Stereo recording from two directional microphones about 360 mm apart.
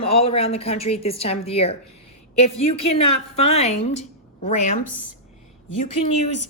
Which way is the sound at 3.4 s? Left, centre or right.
Centre.